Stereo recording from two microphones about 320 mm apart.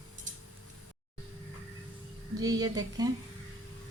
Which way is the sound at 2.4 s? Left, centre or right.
Centre.